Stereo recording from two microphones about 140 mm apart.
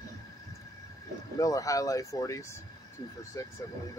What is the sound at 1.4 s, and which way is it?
Speech, 25° left (ahead or behind).